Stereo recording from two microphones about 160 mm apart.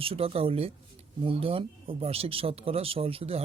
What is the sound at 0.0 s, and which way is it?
Speech, 35° right (ahead or behind).